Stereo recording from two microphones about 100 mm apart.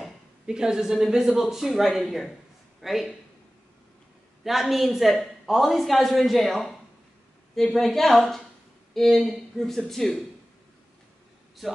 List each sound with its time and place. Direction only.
0.0 s a woman's voice: 5° right (ahead or behind)
4.5 s a woman's voice: centre (ahead or behind)